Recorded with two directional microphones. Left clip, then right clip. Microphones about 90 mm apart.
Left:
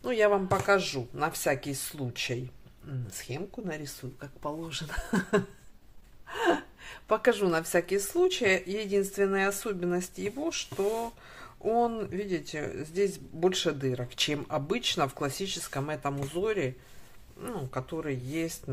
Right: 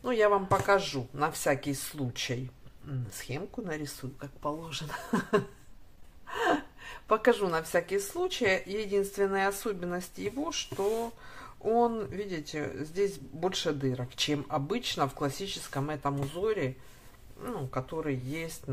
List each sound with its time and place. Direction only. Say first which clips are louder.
0.0 s speech: even; 20° left (ahead or behind)
3.3 s a woman's voice: even; 10° left (ahead or behind); by 18.6 s 30° left (ahead or behind)